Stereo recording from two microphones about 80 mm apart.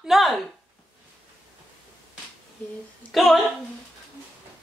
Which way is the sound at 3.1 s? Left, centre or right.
Centre.